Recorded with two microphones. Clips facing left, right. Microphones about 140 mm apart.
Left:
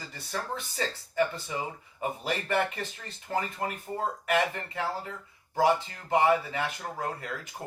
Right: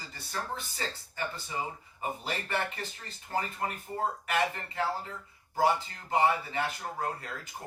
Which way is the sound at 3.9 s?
35° left (ahead or behind).